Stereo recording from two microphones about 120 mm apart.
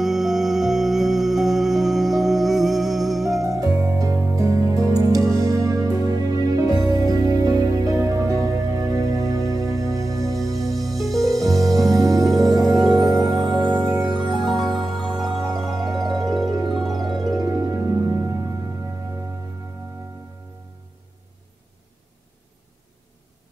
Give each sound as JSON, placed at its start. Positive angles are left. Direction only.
{"t": 0.0, "sound": "music", "side_deg": -5}
{"t": 3.4, "sound": "music", "side_deg": -30}
{"t": 10.9, "sound": "music", "side_deg": 0}
{"t": 11.5, "sound": "music", "side_deg": -30}
{"t": 13.7, "sound": "music", "side_deg": -25}
{"t": 14.1, "sound": "music", "side_deg": 0}
{"t": 16.4, "sound": "music", "side_deg": -30}
{"t": 16.7, "sound": "music", "side_deg": 0}
{"t": 17.2, "sound": "music", "side_deg": -30}